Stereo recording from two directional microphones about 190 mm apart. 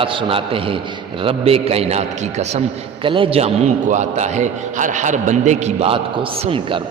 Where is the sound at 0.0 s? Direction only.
25° right (ahead or behind).